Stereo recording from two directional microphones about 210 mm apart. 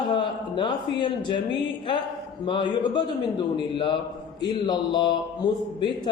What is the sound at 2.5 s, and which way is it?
Speech, 25° left (ahead or behind).